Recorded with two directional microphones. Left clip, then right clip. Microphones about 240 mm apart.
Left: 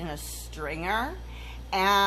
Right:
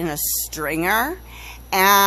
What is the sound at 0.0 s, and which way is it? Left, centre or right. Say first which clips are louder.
Speech: right 12 dB; right.